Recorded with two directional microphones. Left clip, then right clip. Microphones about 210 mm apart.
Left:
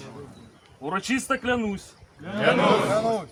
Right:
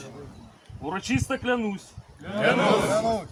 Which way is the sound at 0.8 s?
20° left (ahead or behind).